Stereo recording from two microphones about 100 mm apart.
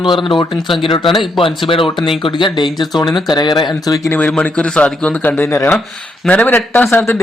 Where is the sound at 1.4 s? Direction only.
60° left (ahead or behind).